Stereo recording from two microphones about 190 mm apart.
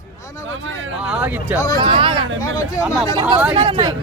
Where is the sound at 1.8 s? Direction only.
25° right (ahead or behind).